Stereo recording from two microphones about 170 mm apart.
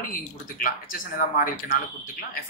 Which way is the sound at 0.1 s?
50° left (ahead or behind).